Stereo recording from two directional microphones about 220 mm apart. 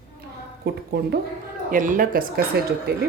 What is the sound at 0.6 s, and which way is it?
Speech, 45° right (ahead or behind).